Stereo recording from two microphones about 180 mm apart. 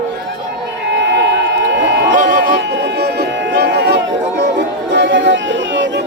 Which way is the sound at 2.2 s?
50° right (ahead or behind).